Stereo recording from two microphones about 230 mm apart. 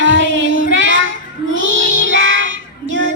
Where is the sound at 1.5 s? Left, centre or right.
Right.